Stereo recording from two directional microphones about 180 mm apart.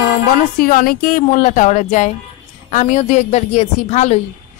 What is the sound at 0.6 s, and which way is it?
Speech, 55° left (ahead or behind).